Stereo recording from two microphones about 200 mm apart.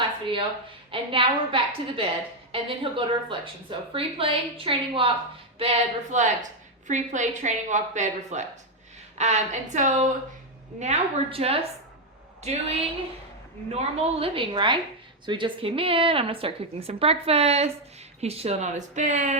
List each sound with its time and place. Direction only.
0.9 s a woman's voice: 25° right (ahead or behind)